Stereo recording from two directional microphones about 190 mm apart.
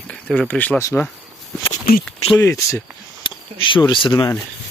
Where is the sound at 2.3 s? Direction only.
15° left (ahead or behind).